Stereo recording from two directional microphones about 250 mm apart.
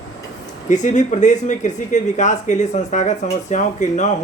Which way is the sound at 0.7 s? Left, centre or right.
Left.